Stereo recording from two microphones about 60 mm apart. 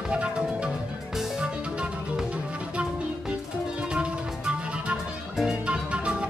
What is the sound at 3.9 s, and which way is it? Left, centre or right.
Music, centre.